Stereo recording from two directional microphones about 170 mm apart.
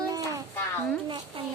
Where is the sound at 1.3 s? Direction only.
30° right (ahead or behind).